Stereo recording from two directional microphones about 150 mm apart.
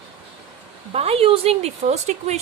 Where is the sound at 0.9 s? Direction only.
40° right (ahead or behind).